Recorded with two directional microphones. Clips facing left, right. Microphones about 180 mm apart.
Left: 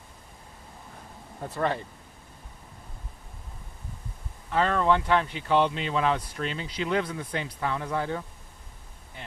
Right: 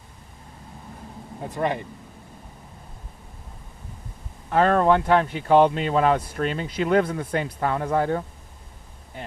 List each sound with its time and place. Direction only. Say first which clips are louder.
1.5 s speech: right 3 dB; 15° right (ahead or behind)
4.4 s speech: right 5 dB; 50° right (ahead or behind)